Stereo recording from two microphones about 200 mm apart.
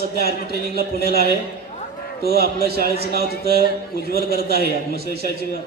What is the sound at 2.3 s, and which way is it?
A man's voice, 50° right (ahead or behind).